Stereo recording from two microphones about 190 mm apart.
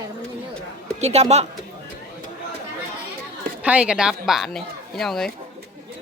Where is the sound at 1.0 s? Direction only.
35° right (ahead or behind).